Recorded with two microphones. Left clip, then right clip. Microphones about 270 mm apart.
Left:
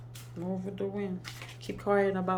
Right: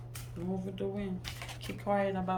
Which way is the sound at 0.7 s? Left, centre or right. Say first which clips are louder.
Left 3 dB; centre.